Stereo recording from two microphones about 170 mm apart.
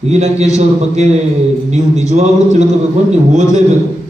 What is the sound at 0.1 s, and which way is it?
Speech, 40° right (ahead or behind).